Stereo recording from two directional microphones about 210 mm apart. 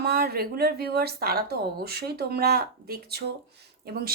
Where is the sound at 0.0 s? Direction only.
50° right (ahead or behind).